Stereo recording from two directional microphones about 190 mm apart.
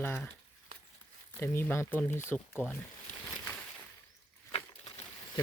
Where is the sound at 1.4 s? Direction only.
10° left (ahead or behind).